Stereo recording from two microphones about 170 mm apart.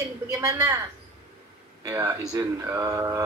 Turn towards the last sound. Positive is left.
turn(degrees=-20)  # may be behind; listen again after turning